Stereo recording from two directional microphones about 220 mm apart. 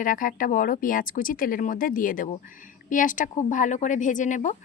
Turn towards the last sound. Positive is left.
turn(degrees=35)  # may be behind; listen again after turning